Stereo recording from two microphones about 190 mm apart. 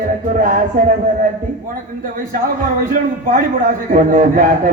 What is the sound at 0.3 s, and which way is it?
Speech, 45° right (ahead or behind).